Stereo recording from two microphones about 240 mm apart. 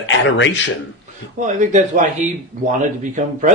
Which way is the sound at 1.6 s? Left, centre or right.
Right.